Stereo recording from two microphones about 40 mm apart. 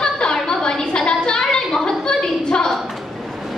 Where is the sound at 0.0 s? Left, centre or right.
Centre.